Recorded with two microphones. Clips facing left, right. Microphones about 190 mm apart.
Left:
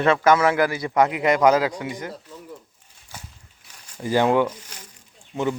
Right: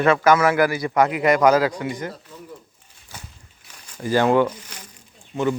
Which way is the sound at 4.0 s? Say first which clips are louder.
Right 1 dB; 20° left (ahead or behind).